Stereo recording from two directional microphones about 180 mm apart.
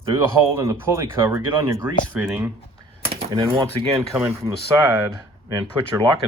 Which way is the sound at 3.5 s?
15° right (ahead or behind).